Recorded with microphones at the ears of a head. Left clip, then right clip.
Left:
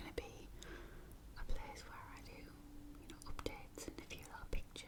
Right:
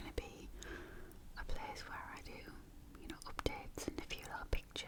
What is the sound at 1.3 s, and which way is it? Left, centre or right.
Whispering, right.